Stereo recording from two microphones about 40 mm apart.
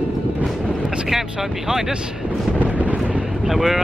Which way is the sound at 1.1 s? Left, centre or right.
Centre.